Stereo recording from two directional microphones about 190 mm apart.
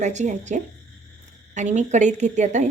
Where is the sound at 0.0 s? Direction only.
40° right (ahead or behind).